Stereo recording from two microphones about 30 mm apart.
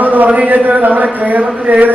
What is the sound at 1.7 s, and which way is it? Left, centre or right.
Chant, right.